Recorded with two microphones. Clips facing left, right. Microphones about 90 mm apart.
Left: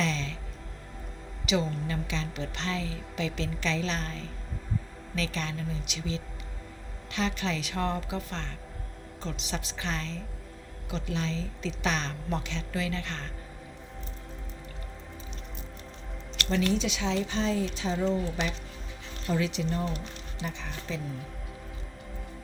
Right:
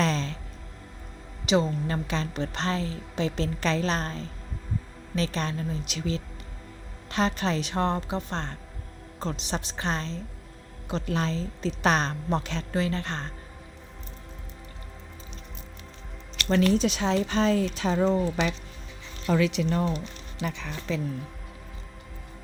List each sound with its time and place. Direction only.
0.0 s music: 40° right (ahead or behind)
1.5 s a woman's voice: 35° right (ahead or behind)
11.0 s a woman's voice: 45° right (ahead or behind)
16.5 s speech: 50° right (ahead or behind)
19.3 s speech: 75° right (ahead or behind)